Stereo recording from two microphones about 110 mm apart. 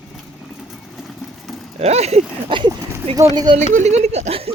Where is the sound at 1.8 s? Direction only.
75° right (ahead or behind).